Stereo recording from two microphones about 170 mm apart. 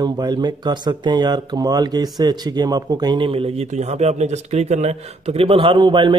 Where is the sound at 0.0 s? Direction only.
25° right (ahead or behind).